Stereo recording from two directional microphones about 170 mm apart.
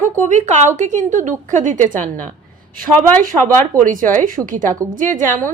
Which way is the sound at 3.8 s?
50° right (ahead or behind).